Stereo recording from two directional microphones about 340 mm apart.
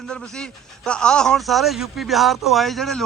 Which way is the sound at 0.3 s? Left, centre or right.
Centre.